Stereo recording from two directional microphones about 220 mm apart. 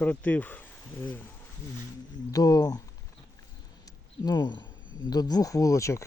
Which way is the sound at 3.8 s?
20° left (ahead or behind).